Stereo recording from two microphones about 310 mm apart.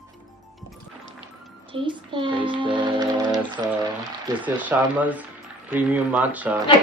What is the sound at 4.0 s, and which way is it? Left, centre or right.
Speech, centre.